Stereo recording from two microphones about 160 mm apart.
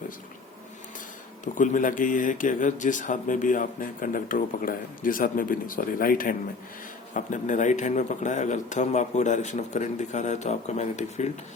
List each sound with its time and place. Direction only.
1.5 s speech: 55° left (ahead or behind)